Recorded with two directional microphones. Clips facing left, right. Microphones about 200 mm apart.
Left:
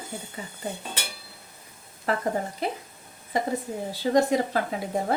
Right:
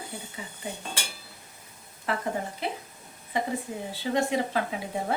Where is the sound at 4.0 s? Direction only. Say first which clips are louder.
Left 5 dB; 40° left (ahead or behind).